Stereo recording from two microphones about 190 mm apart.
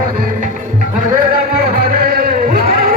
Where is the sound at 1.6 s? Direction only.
55° right (ahead or behind).